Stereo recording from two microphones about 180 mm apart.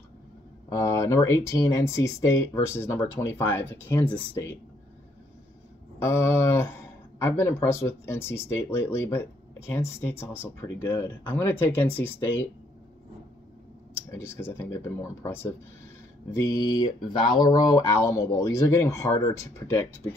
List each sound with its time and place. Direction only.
0.7 s speech: 15° left (ahead or behind)
5.9 s speech: 15° left (ahead or behind)
14.1 s speech: 15° left (ahead or behind)